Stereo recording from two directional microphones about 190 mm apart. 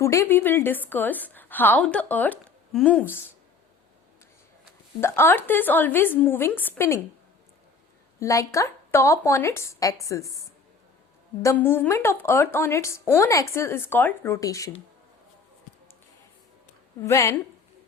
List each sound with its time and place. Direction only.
0.0 s a woman's voice: 15° left (ahead or behind)
4.9 s a woman's voice: 15° left (ahead or behind)
8.2 s a woman's voice: 15° left (ahead or behind)
11.4 s a woman's voice: 10° left (ahead or behind)
17.0 s a woman's voice: 15° left (ahead or behind)